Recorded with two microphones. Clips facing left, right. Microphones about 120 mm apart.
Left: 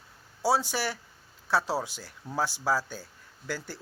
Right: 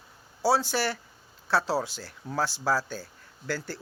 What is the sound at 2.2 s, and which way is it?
Speech, 5° left (ahead or behind).